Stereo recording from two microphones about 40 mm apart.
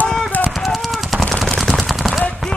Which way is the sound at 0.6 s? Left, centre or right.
Centre.